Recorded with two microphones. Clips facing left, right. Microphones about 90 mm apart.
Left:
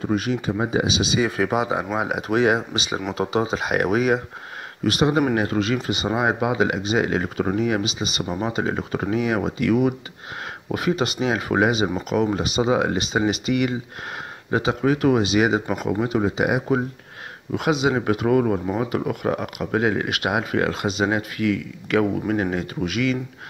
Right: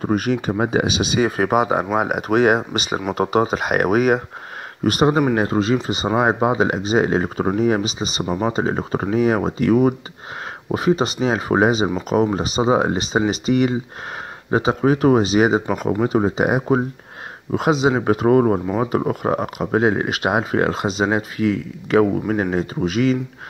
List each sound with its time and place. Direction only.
0.0 s speech: 50° right (ahead or behind); by 23.1 s 35° right (ahead or behind)